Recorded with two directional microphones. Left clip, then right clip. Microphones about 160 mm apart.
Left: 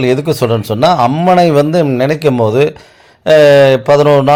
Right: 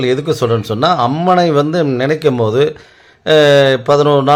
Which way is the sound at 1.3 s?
15° left (ahead or behind).